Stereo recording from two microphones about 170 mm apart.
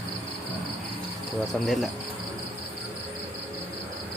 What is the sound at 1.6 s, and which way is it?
Cricket, centre (ahead or behind).